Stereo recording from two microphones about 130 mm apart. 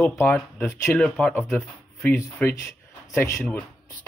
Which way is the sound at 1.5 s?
15° left (ahead or behind).